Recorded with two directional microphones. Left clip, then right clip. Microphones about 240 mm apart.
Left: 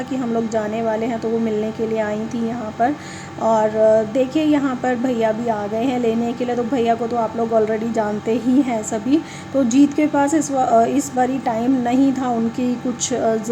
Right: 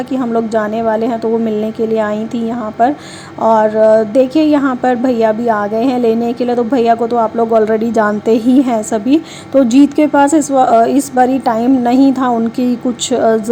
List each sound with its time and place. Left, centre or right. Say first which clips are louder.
0.1 s a woman's voice: right 7 dB; right
3.4 s a woman's voice: right 6 dB; centre